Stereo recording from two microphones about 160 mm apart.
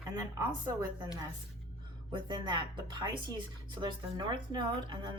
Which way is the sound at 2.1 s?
30° right (ahead or behind).